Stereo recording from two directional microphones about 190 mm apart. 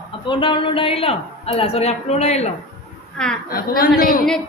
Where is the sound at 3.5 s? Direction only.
50° left (ahead or behind).